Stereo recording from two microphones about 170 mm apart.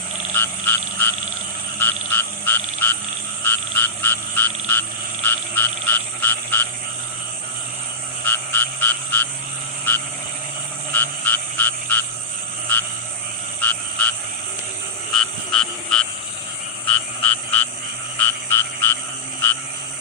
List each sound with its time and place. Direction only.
0.3 s frog: 10° left (ahead or behind)
8.2 s frog: 10° left (ahead or behind)
15.2 s frog: 5° left (ahead or behind)